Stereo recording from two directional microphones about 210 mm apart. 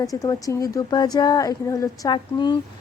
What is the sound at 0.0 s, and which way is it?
A woman's voice, 15° left (ahead or behind).